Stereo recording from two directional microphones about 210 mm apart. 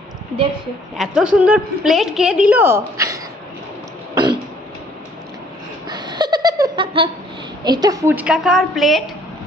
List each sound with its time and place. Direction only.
0.9 s a woman's voice: centre (ahead or behind)
4.1 s throat clearing: 20° right (ahead or behind)
5.9 s a sound: 20° right (ahead or behind)
7.6 s a woman's voice: 20° right (ahead or behind); by 9.1 s centre (ahead or behind)